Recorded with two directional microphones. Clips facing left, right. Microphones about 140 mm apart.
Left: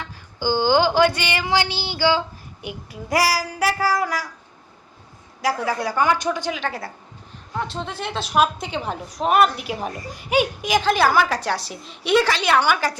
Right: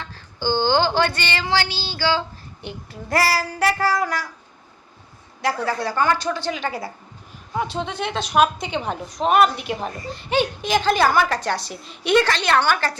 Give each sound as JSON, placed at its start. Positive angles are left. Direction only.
{"t": 0.0, "sound": "child singing", "side_deg": 10}
{"t": 5.4, "sound": "child singing", "side_deg": 5}
{"t": 6.5, "sound": "a woman's voice", "side_deg": 0}